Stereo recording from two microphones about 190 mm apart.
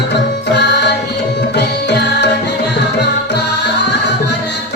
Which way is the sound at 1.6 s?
60° left (ahead or behind).